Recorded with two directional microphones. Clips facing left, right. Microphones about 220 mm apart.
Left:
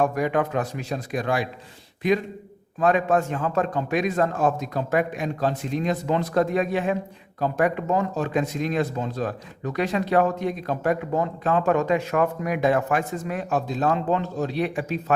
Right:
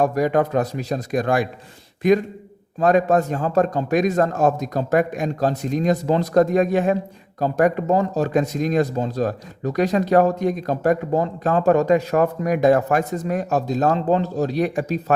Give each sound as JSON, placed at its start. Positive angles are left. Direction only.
{"t": 0.0, "sound": "a man's voice", "side_deg": -40}